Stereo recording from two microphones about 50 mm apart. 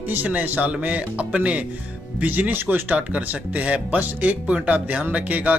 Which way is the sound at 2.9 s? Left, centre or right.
Right.